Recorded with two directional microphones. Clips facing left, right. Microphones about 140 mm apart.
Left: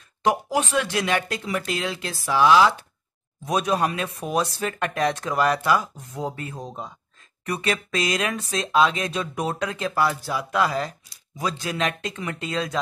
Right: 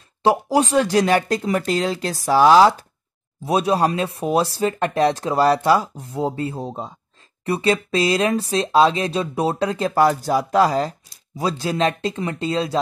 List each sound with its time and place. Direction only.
0.2 s speech: 35° right (ahead or behind)